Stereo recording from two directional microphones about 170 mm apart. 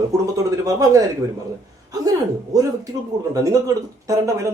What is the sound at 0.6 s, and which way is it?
Speech, 20° right (ahead or behind).